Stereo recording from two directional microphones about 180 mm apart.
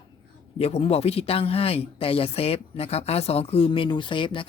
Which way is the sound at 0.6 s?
35° left (ahead or behind).